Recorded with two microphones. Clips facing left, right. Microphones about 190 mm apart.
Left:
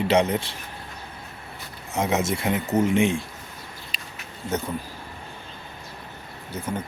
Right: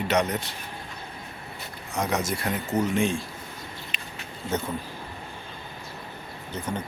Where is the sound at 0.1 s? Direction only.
25° left (ahead or behind).